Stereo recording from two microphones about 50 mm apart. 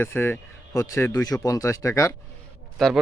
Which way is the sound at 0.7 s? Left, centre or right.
Left.